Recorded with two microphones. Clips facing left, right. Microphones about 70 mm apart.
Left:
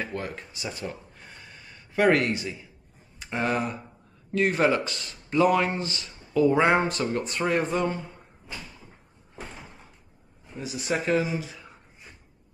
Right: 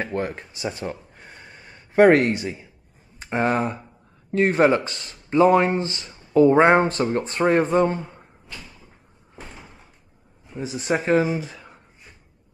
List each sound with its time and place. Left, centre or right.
0.0 s speech: right
1.3 s a sound: right
3.2 s speech: right
9.4 s door: centre
10.6 s speech: right